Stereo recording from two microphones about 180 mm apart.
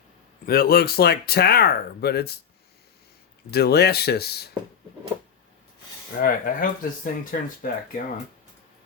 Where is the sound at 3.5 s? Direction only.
65° left (ahead or behind).